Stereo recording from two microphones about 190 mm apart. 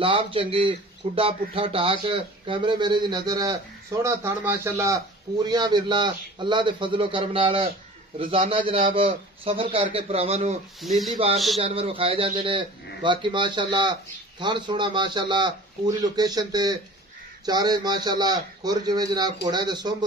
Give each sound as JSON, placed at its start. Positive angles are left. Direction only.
{"t": 0.0, "sound": "a man's voice", "side_deg": -30}
{"t": 10.8, "sound": "speech", "side_deg": 0}
{"t": 11.6, "sound": "a man's voice", "side_deg": -30}